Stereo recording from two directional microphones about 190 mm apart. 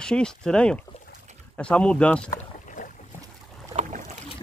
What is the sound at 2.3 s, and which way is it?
Rowboat, 45° left (ahead or behind).